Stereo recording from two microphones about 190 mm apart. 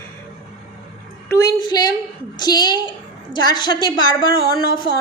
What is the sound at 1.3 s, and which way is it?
A woman's voice, 20° left (ahead or behind).